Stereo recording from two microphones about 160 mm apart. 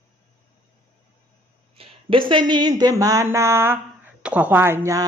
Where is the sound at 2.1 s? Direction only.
30° right (ahead or behind).